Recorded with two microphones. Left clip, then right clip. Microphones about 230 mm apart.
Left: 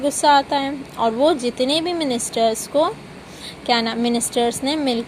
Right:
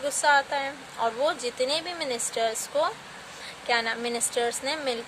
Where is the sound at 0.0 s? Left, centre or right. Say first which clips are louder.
Left 7 dB; centre.